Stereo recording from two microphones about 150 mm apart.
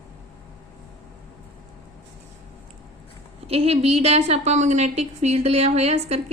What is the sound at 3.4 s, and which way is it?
A woman's voice, 40° right (ahead or behind).